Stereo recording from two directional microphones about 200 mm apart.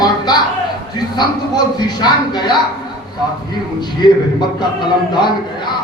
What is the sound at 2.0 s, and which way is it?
Speech, 20° left (ahead or behind).